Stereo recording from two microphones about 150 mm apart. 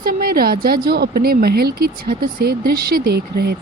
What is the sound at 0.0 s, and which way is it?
A woman's voice, 85° right.